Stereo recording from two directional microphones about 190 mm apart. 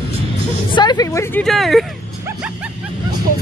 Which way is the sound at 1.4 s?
Centre (ahead or behind).